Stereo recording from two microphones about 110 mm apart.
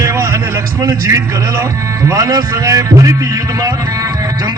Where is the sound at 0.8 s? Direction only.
30° right (ahead or behind).